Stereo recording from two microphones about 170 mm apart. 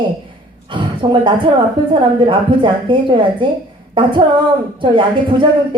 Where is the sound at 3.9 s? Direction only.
30° right (ahead or behind).